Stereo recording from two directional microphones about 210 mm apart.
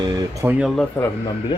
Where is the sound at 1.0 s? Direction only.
10° left (ahead or behind).